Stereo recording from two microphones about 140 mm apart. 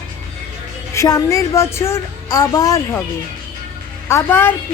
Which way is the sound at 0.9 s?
25° left (ahead or behind).